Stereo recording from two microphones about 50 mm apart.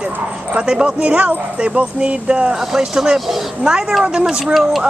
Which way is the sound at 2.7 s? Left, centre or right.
Centre.